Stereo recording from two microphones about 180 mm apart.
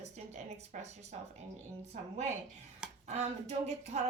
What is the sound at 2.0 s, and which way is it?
A woman's voice, 40° right (ahead or behind).